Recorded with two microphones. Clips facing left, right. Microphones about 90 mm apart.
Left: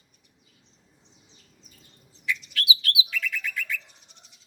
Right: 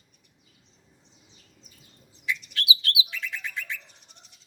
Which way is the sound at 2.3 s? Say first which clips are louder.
Even; 25° right (ahead or behind).